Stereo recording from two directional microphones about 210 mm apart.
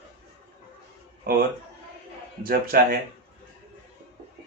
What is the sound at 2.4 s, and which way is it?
Speech, 45° right (ahead or behind).